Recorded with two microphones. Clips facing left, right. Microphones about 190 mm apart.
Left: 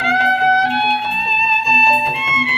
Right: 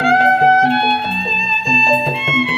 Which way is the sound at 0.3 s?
25° right (ahead or behind).